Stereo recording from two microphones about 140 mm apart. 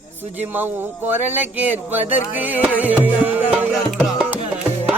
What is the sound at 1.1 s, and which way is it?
Music, 10° right (ahead or behind).